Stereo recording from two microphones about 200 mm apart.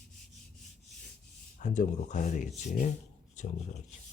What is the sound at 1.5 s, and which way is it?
Speech, 40° left (ahead or behind).